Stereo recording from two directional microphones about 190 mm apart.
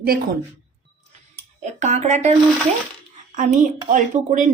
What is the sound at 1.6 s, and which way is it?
Speech, 40° right (ahead or behind).